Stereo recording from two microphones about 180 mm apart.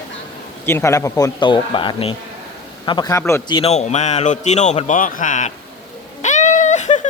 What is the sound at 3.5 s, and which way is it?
A man's voice, 35° left (ahead or behind).